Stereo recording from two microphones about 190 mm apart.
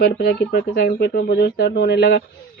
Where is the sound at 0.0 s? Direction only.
55° left (ahead or behind).